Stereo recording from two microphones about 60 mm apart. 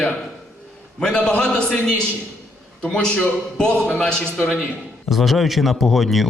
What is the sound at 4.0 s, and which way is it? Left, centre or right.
Speech, centre.